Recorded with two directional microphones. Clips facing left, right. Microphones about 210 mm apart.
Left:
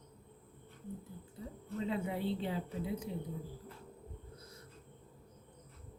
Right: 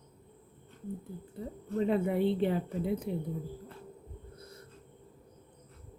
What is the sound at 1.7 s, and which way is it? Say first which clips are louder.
A woman's voice: right 8 dB; 55° right (ahead or behind).